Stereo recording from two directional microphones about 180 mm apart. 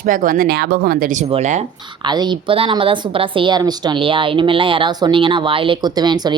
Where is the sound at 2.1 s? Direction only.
25° right (ahead or behind).